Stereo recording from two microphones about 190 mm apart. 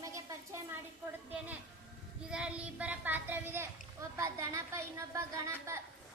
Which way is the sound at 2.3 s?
5° right (ahead or behind).